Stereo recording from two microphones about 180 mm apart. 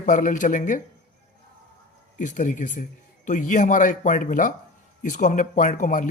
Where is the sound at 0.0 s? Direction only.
45° left (ahead or behind).